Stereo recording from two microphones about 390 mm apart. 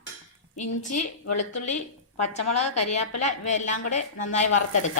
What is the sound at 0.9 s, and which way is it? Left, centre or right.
A woman's voice, left.